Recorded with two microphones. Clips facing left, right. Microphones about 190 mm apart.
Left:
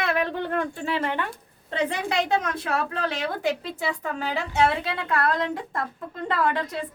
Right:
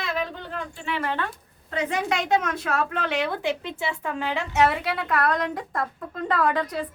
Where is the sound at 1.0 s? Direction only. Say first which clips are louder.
Right 3 dB; 15° left (ahead or behind).